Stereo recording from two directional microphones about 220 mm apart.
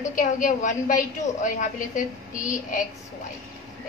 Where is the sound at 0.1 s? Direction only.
35° left (ahead or behind).